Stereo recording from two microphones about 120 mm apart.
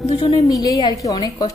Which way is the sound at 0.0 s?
60° left (ahead or behind).